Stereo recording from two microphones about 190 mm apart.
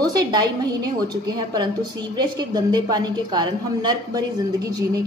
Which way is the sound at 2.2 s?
20° right (ahead or behind).